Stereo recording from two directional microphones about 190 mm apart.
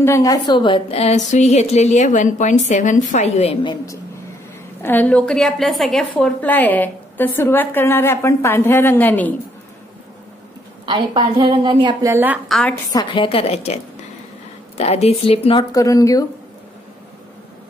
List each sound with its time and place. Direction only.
0.0 s a woman's voice: 15° left (ahead or behind); by 3.7 s 35° left (ahead or behind)
4.8 s a woman's voice: 10° left (ahead or behind)
10.9 s a woman's voice: 25° right (ahead or behind)
12.4 s a woman's voice: 5° left (ahead or behind)
12.9 s a woman's voice: 25° left (ahead or behind)
14.8 s a woman's voice: 35° left (ahead or behind)
15.7 s a woman's voice: 15° left (ahead or behind)